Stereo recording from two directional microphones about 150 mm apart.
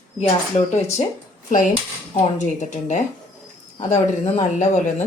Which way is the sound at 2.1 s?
50° left (ahead or behind).